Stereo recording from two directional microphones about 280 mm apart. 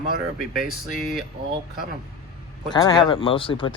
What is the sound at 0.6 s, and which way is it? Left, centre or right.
Speech, centre.